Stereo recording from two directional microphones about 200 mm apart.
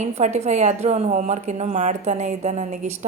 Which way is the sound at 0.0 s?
35° right (ahead or behind).